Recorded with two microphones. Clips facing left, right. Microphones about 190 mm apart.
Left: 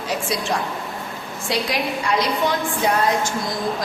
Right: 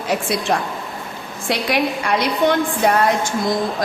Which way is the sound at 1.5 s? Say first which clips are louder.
Right 4 dB; 60° right (ahead or behind).